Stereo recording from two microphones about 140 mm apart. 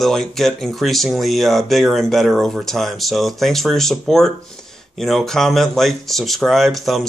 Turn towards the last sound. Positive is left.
turn(degrees=0)  # may be behind; listen again after turning